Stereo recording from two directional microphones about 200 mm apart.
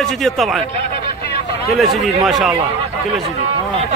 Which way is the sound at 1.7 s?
Centre (ahead or behind).